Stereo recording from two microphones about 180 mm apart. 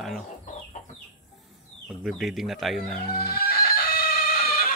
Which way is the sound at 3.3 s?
55° left (ahead or behind).